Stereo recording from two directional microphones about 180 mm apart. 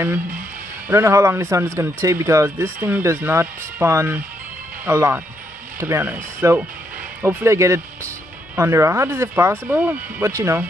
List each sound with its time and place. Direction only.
0.8 s speech: 15° right (ahead or behind)